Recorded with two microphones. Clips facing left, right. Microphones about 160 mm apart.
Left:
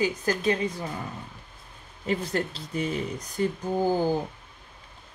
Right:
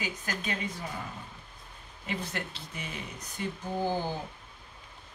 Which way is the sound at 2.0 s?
35° left (ahead or behind).